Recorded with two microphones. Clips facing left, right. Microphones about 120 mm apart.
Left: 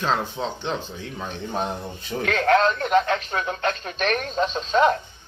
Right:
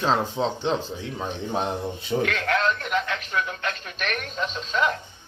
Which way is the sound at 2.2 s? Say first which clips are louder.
Left 7 dB; 35° left (ahead or behind).